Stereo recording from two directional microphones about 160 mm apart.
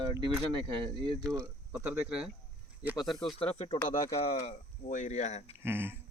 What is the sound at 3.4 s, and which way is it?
Speech, 35° left (ahead or behind).